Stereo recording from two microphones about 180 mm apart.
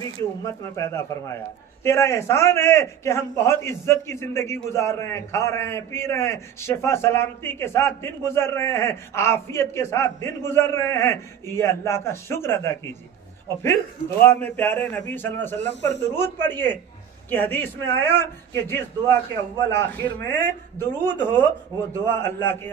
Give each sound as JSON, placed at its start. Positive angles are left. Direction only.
{"t": 0.0, "sound": "a man's voice", "side_deg": 15}